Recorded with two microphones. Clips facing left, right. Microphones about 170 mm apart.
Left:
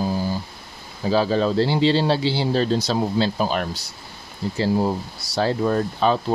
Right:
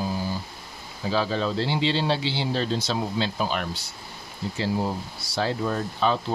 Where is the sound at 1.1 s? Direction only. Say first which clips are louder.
Left 6 dB; 40° left (ahead or behind).